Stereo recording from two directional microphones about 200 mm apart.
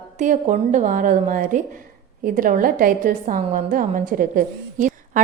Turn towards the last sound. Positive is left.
turn(degrees=-40)  # may be behind; listen again after turning